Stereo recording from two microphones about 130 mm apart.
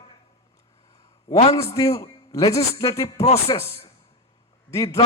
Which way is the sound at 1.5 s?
25° left (ahead or behind).